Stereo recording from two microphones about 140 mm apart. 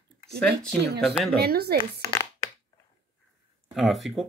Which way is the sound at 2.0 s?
20° left (ahead or behind).